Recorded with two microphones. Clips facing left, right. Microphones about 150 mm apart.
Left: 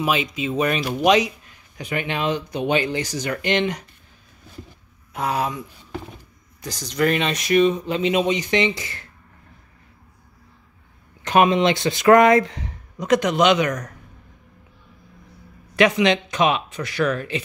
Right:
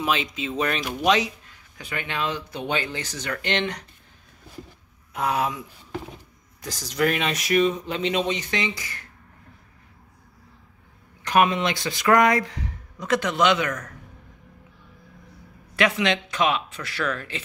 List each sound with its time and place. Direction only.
0.0 s speech: 10° left (ahead or behind)
5.1 s speech: centre (ahead or behind); by 9.0 s 25° left (ahead or behind)
11.2 s speech: 25° left (ahead or behind)
15.7 s speech: 20° left (ahead or behind)